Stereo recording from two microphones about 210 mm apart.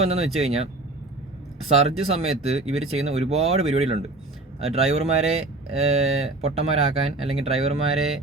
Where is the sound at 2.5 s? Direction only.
30° right (ahead or behind).